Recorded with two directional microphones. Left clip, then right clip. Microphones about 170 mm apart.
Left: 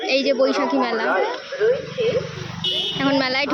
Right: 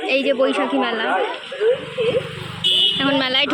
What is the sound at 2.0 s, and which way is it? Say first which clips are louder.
Speech: right 1 dB; 45° right (ahead or behind).